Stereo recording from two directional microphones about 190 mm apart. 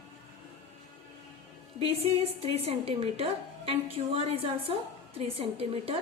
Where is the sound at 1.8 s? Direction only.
30° right (ahead or behind).